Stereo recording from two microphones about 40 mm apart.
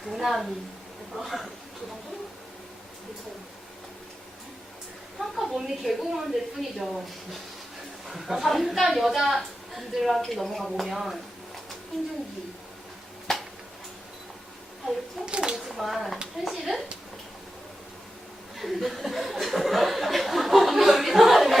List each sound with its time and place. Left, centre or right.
0.0 s a woman's voice: centre
5.2 s a woman's voice: centre
8.0 s a woman's voice: centre
15.3 s speech: right
15.5 s a woman's voice: centre
18.5 s speech: centre